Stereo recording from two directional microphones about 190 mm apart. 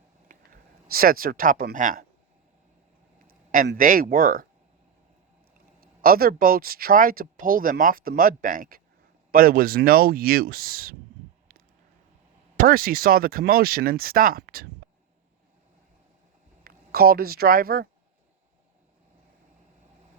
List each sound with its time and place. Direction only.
0.3 s speech: 50° right (ahead or behind)
3.2 s a sound: 45° right (ahead or behind)
3.8 s speech: 45° right (ahead or behind)
5.8 s speech: 50° right (ahead or behind)
12.5 s speech: 50° right (ahead or behind)
16.6 s a woman's voice: 50° right (ahead or behind)